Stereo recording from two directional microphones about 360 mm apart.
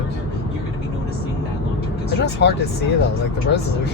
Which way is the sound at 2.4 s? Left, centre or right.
Left.